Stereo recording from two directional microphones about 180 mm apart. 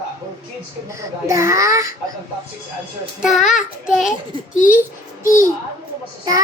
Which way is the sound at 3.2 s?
Centre (ahead or behind).